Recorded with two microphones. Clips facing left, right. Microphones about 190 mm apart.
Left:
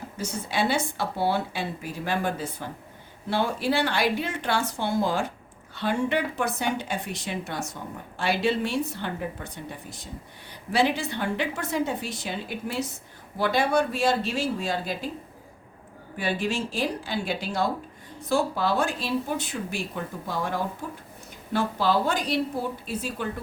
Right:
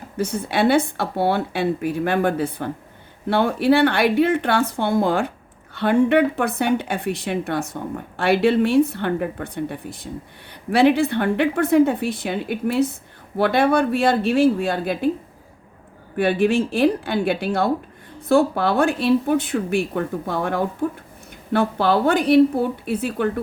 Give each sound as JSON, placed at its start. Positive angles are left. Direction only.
{"t": 0.2, "sound": "a woman's voice", "side_deg": -60}
{"t": 16.1, "sound": "a woman's voice", "side_deg": -55}